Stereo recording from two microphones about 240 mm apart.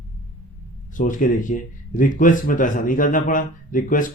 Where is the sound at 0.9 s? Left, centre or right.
Left.